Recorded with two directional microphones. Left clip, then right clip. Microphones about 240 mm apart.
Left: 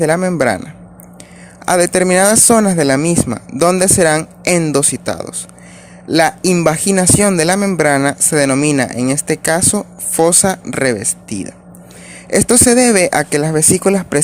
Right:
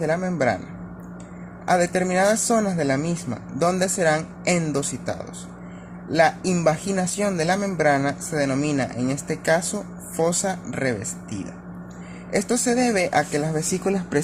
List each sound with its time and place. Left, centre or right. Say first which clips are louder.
0.0 s speech: left 9 dB; left
1.6 s speech: left 8 dB; left